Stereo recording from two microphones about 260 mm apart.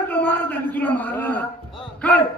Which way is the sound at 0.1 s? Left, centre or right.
Centre.